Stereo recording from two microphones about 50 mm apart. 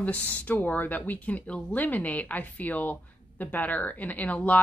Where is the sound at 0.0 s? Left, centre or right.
Left.